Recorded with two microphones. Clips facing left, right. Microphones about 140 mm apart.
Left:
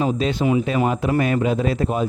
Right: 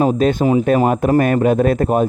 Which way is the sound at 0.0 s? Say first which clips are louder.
Right 6 dB; 50° right (ahead or behind).